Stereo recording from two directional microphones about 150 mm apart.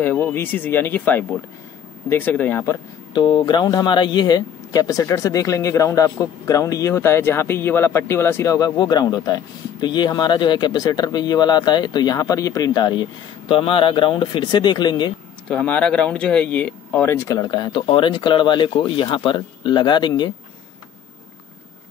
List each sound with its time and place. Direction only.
0.0 s speech: 15° left (ahead or behind)
3.1 s speech: 30° left (ahead or behind)
15.4 s speech: 10° left (ahead or behind)
17.1 s speech: 20° left (ahead or behind)